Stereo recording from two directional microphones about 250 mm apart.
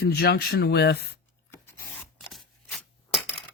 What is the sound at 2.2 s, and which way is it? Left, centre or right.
Scissors, centre.